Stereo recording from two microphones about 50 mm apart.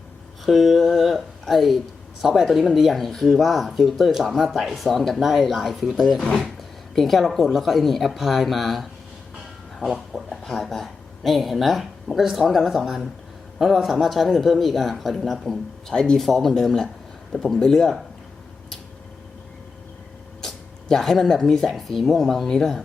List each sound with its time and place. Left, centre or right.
0.4 s speech: centre
10.1 s speech: centre
15.9 s speech: centre
16.2 s speech: centre
20.4 s a sound: centre
21.3 s speech: centre
22.4 s speech: centre